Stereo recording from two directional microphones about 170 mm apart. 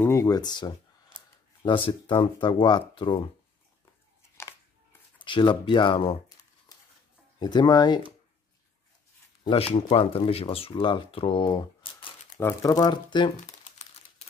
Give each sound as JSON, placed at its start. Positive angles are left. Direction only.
{"t": 0.0, "sound": "speech", "side_deg": 20}
{"t": 5.2, "sound": "speech", "side_deg": 30}
{"t": 7.3, "sound": "speech", "side_deg": 25}
{"t": 9.4, "sound": "speech", "side_deg": 35}
{"t": 12.4, "sound": "speech", "side_deg": 20}